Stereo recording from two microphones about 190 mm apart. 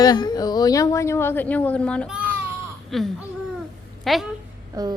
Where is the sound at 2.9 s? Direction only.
Centre (ahead or behind).